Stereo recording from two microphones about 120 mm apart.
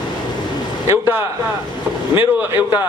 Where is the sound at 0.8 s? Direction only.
20° right (ahead or behind).